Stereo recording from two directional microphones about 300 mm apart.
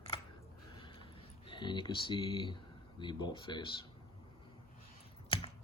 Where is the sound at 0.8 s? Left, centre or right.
Centre.